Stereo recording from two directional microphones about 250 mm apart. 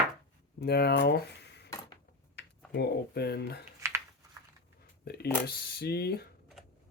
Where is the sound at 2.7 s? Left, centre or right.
Left.